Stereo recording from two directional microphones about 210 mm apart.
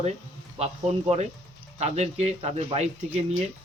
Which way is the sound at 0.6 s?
30° right (ahead or behind).